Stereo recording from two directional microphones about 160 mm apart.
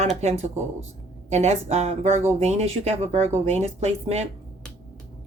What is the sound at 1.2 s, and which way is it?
Speech, 45° right (ahead or behind).